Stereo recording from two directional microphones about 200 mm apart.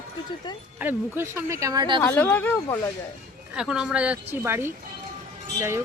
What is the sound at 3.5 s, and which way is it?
Speech, 5° right (ahead or behind).